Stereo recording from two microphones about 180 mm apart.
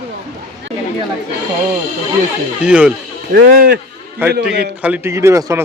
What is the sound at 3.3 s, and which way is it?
Speech, 55° right (ahead or behind).